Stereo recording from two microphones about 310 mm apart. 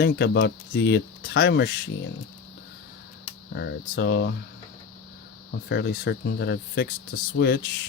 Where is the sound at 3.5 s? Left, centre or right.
Left.